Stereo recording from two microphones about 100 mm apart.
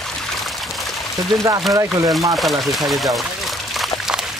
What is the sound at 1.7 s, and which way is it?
Speech, 35° right (ahead or behind).